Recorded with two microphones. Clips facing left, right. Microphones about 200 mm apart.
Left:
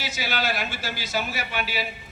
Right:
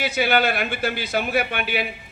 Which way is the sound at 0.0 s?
60° right (ahead or behind).